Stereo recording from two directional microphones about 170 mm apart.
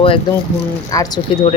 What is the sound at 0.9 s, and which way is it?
Speech, 20° left (ahead or behind).